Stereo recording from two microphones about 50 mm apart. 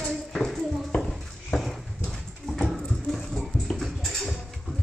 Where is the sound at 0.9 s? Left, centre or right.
Centre.